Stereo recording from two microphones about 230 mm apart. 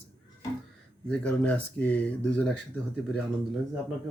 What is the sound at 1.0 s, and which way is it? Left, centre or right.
A man's voice, centre.